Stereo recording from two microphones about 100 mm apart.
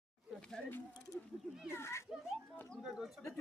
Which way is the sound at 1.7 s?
25° left (ahead or behind).